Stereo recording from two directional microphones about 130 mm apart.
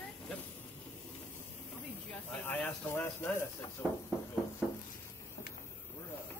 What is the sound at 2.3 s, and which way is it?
Speech, 10° left (ahead or behind).